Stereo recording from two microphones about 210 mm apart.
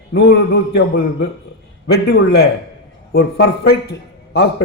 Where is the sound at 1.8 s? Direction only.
50° left (ahead or behind).